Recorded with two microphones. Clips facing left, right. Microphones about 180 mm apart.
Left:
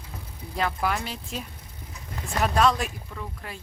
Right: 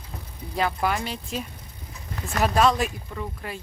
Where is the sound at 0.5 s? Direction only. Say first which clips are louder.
Right 2 dB; centre (ahead or behind).